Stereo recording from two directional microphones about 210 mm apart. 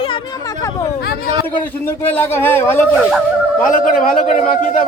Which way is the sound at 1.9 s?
10° left (ahead or behind).